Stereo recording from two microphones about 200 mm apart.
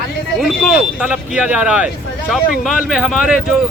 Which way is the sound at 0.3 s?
Centre (ahead or behind).